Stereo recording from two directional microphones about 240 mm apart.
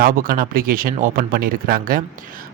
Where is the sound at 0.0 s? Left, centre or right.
Right.